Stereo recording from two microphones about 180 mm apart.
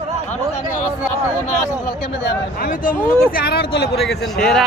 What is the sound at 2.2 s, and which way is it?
Speech, 50° left (ahead or behind).